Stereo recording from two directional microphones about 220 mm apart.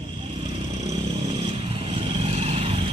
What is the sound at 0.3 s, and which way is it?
Vehicle, 25° right (ahead or behind).